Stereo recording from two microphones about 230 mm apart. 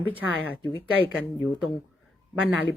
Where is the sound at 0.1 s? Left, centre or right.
Centre.